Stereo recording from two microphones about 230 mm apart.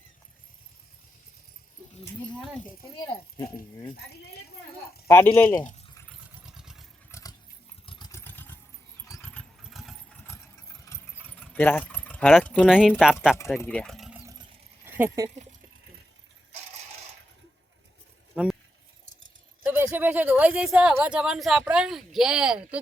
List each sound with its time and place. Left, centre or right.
3.9 s speech: left
5.0 s speech: centre
6.1 s vehicle: centre
7.1 s keys jangling: centre
7.9 s vehicle: centre
9.0 s engine: centre
10.2 s keys jangling: centre
13.6 s speech: centre
19.6 s speech: centre